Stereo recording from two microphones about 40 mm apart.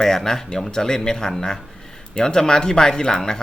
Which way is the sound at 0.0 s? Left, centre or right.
Centre.